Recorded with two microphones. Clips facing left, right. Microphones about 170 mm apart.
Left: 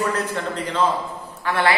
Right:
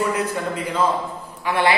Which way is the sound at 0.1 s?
10° right (ahead or behind).